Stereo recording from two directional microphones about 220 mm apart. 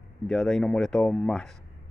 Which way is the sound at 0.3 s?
Centre (ahead or behind).